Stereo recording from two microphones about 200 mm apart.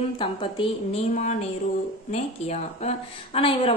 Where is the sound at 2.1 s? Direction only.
35° left (ahead or behind).